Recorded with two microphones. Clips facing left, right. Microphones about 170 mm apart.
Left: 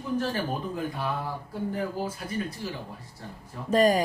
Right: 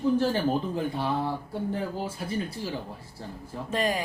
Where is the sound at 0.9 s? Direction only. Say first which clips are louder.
Right 3 dB; 30° right (ahead or behind).